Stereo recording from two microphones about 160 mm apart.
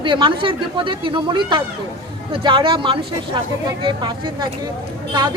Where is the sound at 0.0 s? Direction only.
30° right (ahead or behind).